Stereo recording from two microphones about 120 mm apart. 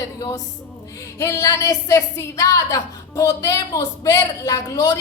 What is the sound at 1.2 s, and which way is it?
A woman's voice, 25° left (ahead or behind).